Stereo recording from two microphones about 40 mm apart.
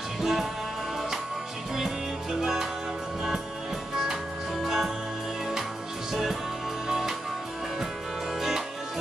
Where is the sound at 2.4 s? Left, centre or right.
Centre.